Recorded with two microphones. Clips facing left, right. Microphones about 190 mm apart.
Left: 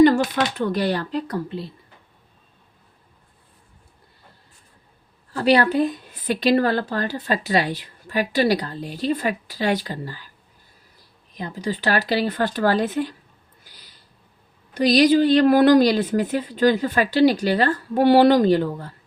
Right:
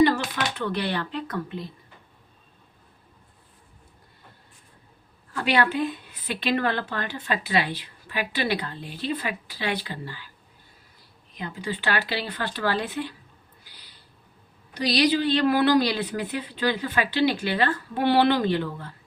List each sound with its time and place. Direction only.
0.0 s speech: 45° left (ahead or behind)
5.3 s a woman's voice: 40° left (ahead or behind)
11.3 s a woman's voice: 40° left (ahead or behind)
13.7 s a sound: 45° left (ahead or behind)
14.7 s a woman's voice: 50° left (ahead or behind)